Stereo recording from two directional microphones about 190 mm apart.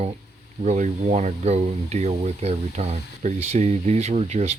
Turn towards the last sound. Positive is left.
turn(degrees=-35)  # may be behind; listen again after turning